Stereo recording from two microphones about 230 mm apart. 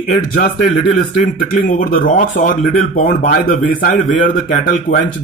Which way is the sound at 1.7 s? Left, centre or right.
Left.